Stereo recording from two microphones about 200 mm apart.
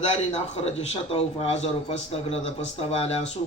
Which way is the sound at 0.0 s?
30° left (ahead or behind).